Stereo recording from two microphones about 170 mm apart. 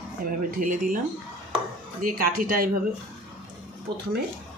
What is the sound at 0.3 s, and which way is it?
Speech, 50° right (ahead or behind).